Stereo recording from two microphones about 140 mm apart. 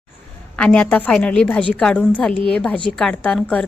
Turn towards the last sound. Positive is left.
turn(degrees=10)  # may be behind; listen again after turning